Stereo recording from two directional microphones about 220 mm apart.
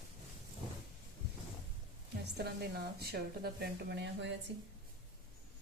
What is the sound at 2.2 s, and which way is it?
A woman's voice, 50° right (ahead or behind).